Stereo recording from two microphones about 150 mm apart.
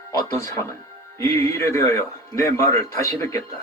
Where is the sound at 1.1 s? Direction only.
20° left (ahead or behind).